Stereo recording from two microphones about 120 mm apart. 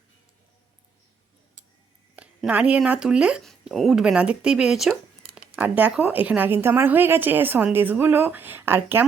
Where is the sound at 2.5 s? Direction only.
10° right (ahead or behind).